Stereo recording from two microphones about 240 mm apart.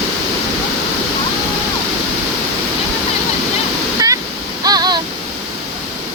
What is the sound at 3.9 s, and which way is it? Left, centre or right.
Waterfall, centre.